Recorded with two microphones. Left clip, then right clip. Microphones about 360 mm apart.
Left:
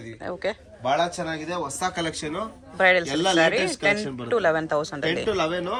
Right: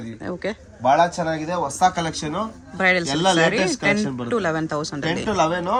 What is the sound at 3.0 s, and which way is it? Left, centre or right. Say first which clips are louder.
Speech: right 3 dB; right.